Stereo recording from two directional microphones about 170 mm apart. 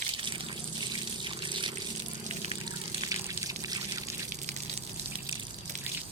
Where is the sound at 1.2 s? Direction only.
30° right (ahead or behind).